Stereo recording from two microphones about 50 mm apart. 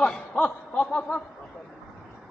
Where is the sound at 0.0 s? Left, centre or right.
Centre.